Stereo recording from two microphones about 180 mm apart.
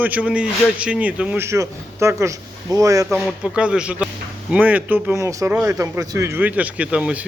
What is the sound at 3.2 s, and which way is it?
A man's voice, 5° right (ahead or behind).